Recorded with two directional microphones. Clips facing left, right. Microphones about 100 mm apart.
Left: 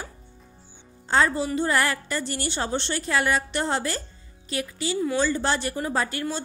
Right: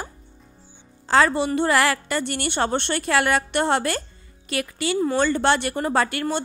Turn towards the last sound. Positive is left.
turn(degrees=-65)  # may be behind; listen again after turning